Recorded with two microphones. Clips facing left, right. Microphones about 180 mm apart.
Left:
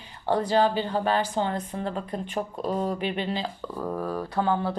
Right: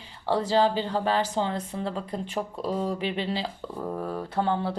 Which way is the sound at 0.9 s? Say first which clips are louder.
Left 1 dB; 90° right.